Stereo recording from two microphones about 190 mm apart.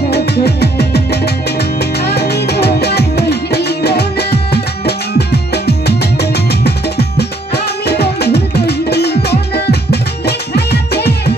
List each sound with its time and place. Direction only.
0.1 s music: 60° left (ahead or behind)